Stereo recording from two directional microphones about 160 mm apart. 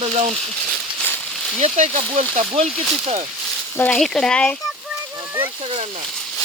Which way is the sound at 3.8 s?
5° left (ahead or behind).